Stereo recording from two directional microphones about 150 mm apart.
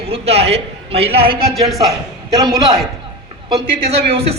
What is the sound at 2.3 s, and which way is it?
Speech, 25° right (ahead or behind).